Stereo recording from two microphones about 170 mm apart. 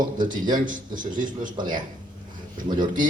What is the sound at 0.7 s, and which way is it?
Speech, 50° right (ahead or behind).